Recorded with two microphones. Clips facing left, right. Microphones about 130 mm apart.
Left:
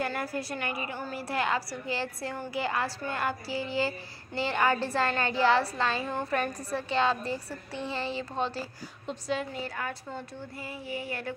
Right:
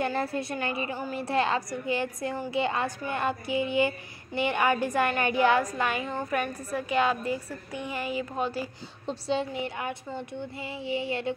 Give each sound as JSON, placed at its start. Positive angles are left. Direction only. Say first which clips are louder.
{"t": 0.0, "sound": "a woman's voice", "louder": "right 3 dB", "side_deg": -25}
{"t": 9.0, "sound": "speech", "louder": "right 3 dB", "side_deg": -30}